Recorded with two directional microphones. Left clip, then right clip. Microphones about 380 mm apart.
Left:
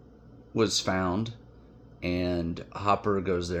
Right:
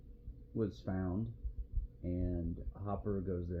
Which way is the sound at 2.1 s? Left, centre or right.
Centre.